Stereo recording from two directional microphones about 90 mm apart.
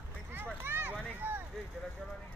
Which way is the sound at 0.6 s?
25° right (ahead or behind).